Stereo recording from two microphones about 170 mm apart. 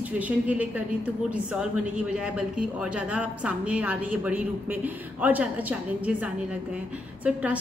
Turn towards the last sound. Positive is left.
turn(degrees=-10)  # may be behind; listen again after turning